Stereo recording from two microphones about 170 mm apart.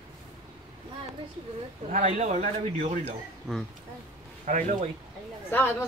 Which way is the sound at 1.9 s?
40° right (ahead or behind).